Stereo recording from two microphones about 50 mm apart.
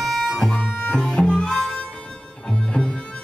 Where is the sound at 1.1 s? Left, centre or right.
Centre.